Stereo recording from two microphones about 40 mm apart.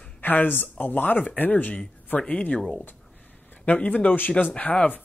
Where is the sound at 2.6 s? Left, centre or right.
Centre.